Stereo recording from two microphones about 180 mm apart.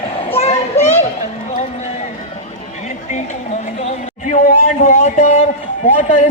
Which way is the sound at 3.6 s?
40° left (ahead or behind).